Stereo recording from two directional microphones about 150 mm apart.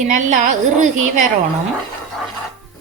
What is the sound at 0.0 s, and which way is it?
A woman's voice, 55° right (ahead or behind).